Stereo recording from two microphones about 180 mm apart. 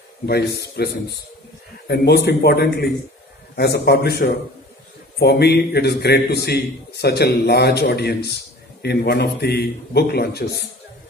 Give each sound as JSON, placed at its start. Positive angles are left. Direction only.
{"t": 0.3, "sound": "a man's voice", "side_deg": 65}